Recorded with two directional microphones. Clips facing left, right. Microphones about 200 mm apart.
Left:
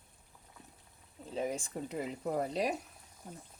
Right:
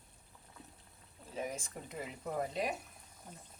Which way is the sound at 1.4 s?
30° left (ahead or behind).